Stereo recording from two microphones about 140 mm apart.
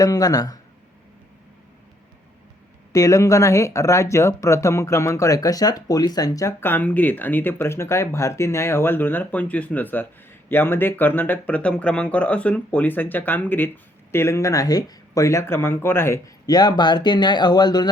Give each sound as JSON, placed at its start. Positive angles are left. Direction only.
{"t": 0.0, "sound": "speech", "side_deg": 25}
{"t": 2.9, "sound": "speech", "side_deg": 25}